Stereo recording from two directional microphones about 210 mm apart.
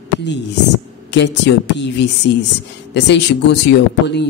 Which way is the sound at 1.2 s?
55° left (ahead or behind).